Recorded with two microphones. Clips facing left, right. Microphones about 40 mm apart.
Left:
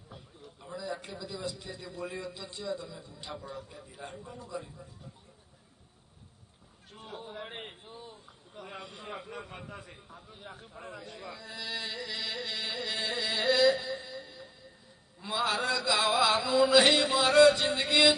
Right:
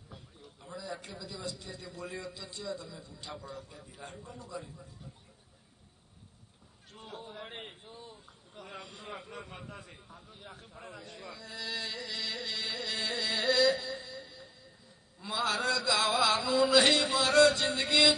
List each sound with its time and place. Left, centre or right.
0.6 s a sound: centre
1.2 s mantra: left; by 4.4 s centre
6.9 s a sound: centre
8.9 s a man's voice: centre
11.3 s music: left
15.2 s mantra: left